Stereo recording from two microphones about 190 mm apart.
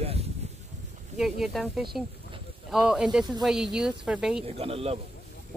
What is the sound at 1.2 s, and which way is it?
Speech, centre (ahead or behind).